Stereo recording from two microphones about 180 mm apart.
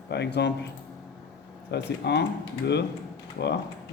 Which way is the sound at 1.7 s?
65° left (ahead or behind).